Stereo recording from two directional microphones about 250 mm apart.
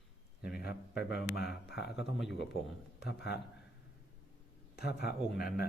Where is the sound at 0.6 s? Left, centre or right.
Left.